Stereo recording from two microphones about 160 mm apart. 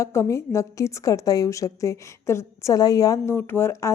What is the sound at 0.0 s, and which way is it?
A woman's voice, 20° left (ahead or behind).